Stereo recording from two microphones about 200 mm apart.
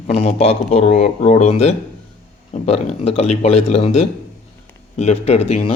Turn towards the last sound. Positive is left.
turn(degrees=30)  # may be behind; listen again after turning